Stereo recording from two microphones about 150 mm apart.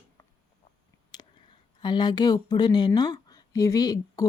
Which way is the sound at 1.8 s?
30° left (ahead or behind).